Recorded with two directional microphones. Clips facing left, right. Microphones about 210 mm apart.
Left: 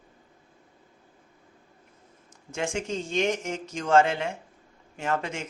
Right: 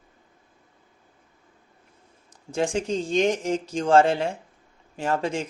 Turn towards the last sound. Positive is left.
turn(degrees=-30)  # may be behind; listen again after turning